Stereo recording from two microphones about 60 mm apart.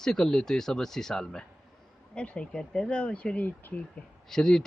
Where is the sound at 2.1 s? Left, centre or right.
Centre.